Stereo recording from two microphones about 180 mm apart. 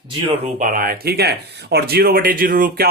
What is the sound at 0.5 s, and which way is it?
Speech, 50° right (ahead or behind).